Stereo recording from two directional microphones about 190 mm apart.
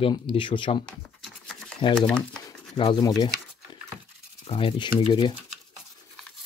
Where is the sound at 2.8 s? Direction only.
25° left (ahead or behind).